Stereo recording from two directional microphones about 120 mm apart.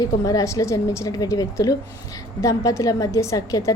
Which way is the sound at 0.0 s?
30° left (ahead or behind).